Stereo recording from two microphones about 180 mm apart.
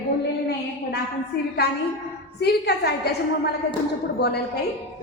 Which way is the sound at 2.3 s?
65° left (ahead or behind).